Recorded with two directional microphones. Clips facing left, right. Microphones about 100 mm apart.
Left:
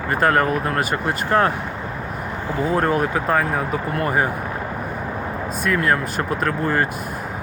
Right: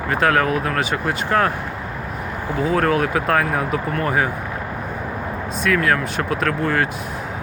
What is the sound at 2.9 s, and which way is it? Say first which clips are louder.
Speech: right 1 dB; centre (ahead or behind).